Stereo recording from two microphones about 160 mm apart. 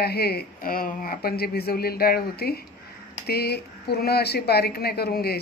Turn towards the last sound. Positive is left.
turn(degrees=75)  # may be behind; listen again after turning